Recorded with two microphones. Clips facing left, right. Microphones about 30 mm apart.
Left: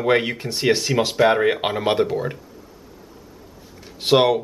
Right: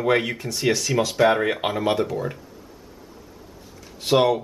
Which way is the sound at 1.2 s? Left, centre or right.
Centre.